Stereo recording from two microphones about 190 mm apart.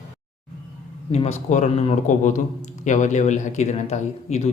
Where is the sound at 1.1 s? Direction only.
35° left (ahead or behind).